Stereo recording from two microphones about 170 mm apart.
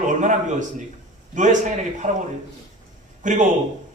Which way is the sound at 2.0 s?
45° right (ahead or behind).